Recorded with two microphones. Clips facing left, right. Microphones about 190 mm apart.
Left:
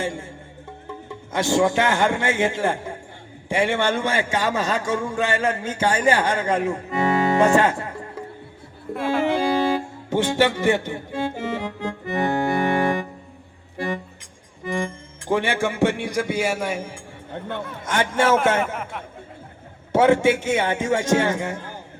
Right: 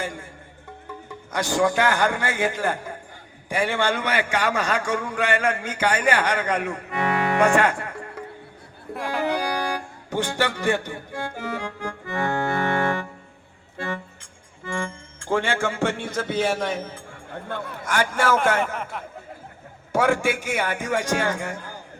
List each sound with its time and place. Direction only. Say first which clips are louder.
0.0 s a man's voice: left 4 dB; 25° left (ahead or behind)
9.2 s music: left 4 dB; 25° left (ahead or behind)
14.6 s speech: left 4 dB; 20° left (ahead or behind)
18.6 s speech: left 1 dB; 5° left (ahead or behind)
19.9 s a man's voice: left 5 dB; 25° left (ahead or behind)